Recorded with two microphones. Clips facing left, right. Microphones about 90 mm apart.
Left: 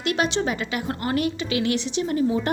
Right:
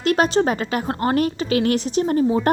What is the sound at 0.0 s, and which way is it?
A woman's voice, 40° right (ahead or behind).